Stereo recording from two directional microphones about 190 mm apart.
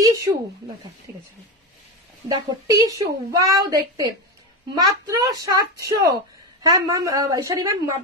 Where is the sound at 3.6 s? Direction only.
20° right (ahead or behind).